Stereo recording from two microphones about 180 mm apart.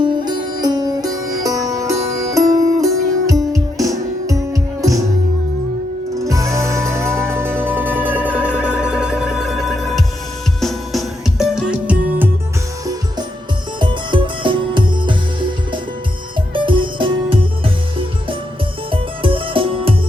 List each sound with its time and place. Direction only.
0.0 s music: 25° right (ahead or behind)
6.2 s music: 15° right (ahead or behind)
13.7 s music: 25° right (ahead or behind)
18.9 s music: 30° right (ahead or behind)